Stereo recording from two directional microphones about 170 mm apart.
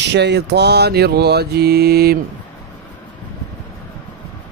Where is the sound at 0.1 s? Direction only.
85° right; by 2.1 s 65° right (ahead or behind).